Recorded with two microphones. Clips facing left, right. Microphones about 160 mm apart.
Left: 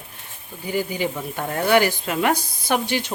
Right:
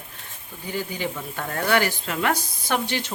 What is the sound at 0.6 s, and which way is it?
Speech, 10° left (ahead or behind).